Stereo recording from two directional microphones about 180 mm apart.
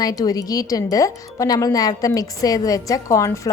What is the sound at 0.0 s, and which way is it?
A woman's voice, 20° left (ahead or behind).